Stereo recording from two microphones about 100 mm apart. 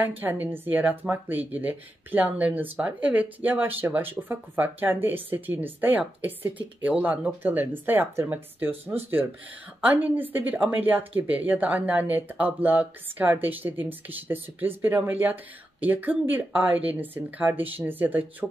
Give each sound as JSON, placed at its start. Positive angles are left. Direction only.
{"t": 0.2, "sound": "speech", "side_deg": -20}